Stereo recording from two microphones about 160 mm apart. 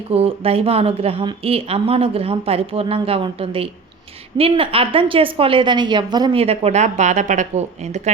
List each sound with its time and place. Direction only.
0.1 s a woman's voice: 40° right (ahead or behind)
6.4 s speech: 40° right (ahead or behind)